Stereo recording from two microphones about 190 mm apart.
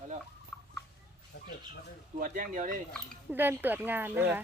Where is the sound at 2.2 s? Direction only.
45° right (ahead or behind).